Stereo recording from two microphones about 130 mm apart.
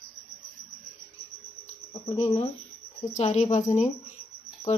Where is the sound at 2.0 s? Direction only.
55° left (ahead or behind).